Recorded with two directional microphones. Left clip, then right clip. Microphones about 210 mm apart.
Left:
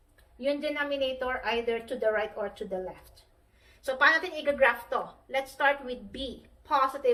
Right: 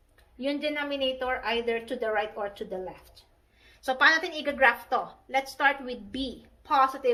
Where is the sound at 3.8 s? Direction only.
50° right (ahead or behind).